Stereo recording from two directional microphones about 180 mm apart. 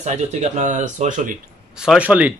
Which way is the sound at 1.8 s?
5° right (ahead or behind).